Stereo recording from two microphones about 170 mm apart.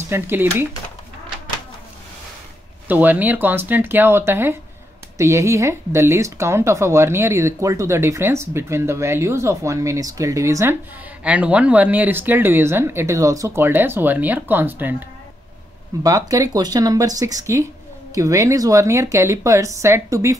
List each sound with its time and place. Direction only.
0.1 s speech: 15° right (ahead or behind)
2.9 s speech: 10° right (ahead or behind)